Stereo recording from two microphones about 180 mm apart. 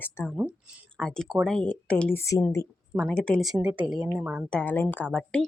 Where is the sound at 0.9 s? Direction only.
5° left (ahead or behind).